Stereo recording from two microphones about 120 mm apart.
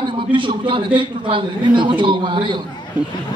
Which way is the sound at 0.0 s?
45° right (ahead or behind).